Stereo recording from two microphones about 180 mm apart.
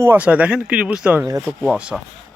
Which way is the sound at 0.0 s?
10° right (ahead or behind).